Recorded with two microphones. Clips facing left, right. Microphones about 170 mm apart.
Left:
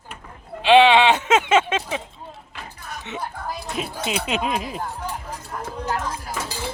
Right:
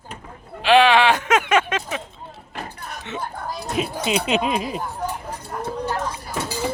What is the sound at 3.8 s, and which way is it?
Speech, centre (ahead or behind).